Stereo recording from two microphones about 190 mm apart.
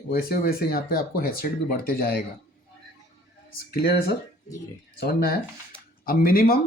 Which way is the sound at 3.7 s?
55° left (ahead or behind).